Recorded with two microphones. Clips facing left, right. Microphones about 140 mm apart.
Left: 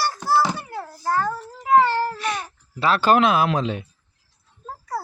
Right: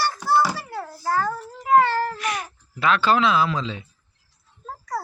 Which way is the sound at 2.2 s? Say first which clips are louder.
Left 1 dB; 30° left (ahead or behind).